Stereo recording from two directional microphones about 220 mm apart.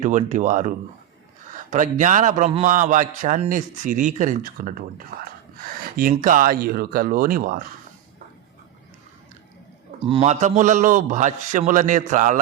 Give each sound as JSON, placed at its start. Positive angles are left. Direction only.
{"t": 0.0, "sound": "a man's voice", "side_deg": -35}
{"t": 10.0, "sound": "a man's voice", "side_deg": -25}